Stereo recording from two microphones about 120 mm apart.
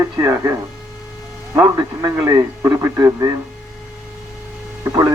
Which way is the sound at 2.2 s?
25° right (ahead or behind).